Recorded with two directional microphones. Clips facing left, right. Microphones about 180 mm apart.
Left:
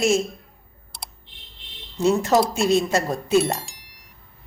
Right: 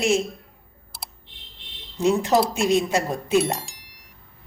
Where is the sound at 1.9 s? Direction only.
15° right (ahead or behind).